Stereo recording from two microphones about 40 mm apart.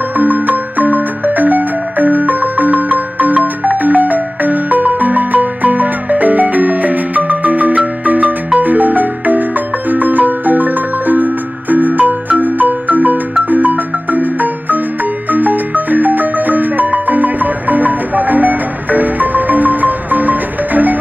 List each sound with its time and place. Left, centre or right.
0.2 s music: right
9.8 s marimba: right